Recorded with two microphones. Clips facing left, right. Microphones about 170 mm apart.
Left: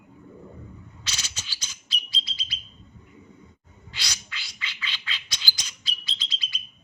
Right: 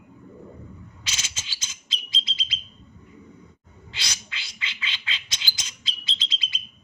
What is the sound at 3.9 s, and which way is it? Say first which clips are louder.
Bird: right 1 dB; 25° right (ahead or behind).